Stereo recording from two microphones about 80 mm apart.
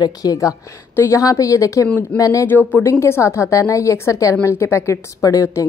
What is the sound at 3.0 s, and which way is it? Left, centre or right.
A woman's voice, left.